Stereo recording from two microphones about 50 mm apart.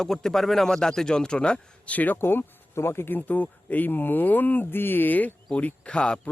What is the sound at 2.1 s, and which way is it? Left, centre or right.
Speech, left.